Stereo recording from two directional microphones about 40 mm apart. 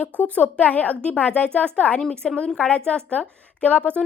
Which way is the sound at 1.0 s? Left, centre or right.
Left.